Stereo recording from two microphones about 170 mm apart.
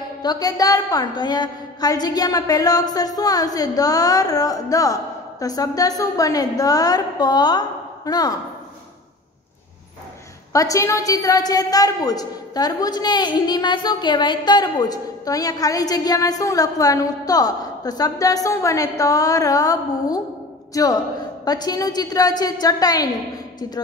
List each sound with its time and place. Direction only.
0.2 s a woman's voice: 25° left (ahead or behind)
10.5 s a woman's voice: 20° left (ahead or behind)